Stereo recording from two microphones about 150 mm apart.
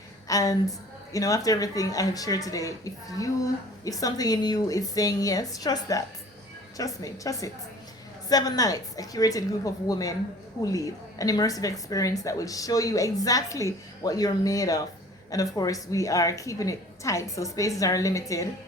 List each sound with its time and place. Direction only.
0.3 s a woman's voice: 25° left (ahead or behind)